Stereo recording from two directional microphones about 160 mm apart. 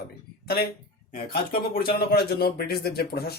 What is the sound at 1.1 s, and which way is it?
Speech, 70° left (ahead or behind).